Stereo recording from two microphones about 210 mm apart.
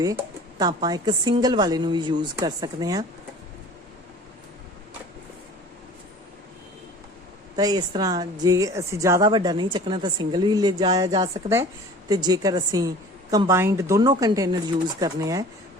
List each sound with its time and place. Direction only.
0.0 s a woman's voice: 15° right (ahead or behind)
7.5 s a woman's voice: 20° right (ahead or behind)